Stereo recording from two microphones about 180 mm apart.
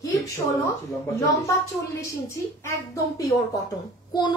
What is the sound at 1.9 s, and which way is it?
Speech, 15° left (ahead or behind).